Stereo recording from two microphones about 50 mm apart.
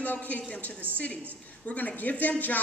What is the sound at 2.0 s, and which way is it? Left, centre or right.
Speech, left.